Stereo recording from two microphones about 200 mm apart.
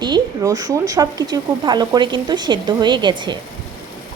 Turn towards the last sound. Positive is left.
turn(degrees=-25)  # may be behind; listen again after turning